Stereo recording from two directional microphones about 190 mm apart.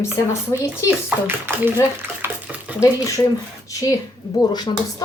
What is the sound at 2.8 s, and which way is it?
A woman's voice, 15° left (ahead or behind).